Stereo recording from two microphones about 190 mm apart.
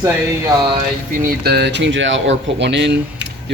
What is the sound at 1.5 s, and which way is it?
Speech, 60° right (ahead or behind).